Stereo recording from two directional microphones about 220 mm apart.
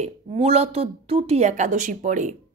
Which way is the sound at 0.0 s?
30° right (ahead or behind).